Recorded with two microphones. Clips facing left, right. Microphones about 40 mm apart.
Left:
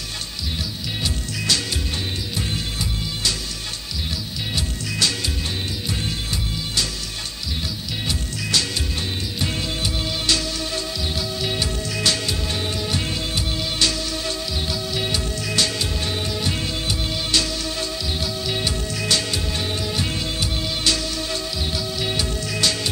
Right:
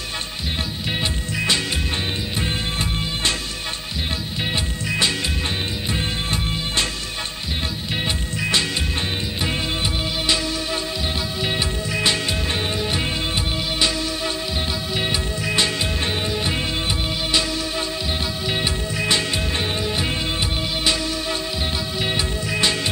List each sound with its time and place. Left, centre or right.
1.0 s music: right
4.8 s music: right
7.9 s music: right
11.4 s music: right
15.0 s music: right
18.5 s music: right
22.0 s music: right